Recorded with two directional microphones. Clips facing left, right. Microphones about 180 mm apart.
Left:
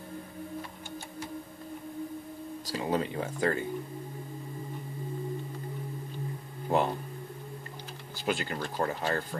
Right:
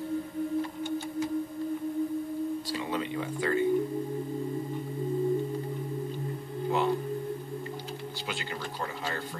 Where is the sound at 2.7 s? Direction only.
40° left (ahead or behind).